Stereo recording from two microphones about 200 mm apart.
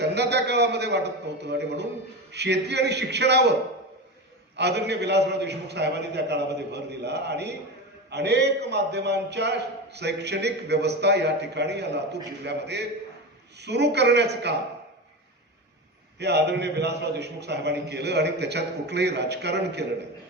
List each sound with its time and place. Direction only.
0.0 s a man's voice: 55° right (ahead or behind)
4.5 s a man's voice: 55° right (ahead or behind)
16.1 s a man's voice: 55° right (ahead or behind)